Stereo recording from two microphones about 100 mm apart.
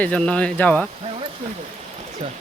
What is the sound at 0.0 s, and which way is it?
Speech, 10° left (ahead or behind).